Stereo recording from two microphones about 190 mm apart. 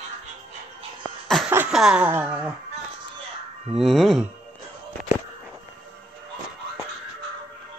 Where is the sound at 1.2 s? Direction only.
Centre (ahead or behind).